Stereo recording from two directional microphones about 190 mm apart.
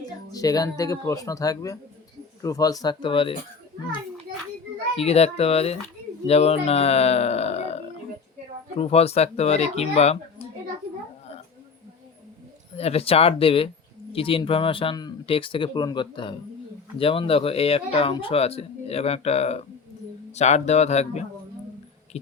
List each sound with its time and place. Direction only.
0.0 s speech: 20° left (ahead or behind)
4.9 s speech: 35° left (ahead or behind)
12.7 s speech: 30° left (ahead or behind)
22.1 s heart sounds: 35° left (ahead or behind)